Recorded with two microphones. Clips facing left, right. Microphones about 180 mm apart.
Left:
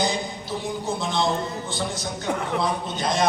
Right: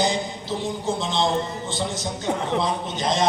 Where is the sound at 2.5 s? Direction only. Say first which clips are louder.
Right 1 dB; 20° right (ahead or behind).